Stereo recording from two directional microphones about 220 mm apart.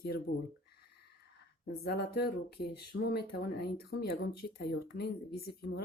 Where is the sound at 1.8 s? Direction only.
45° left (ahead or behind).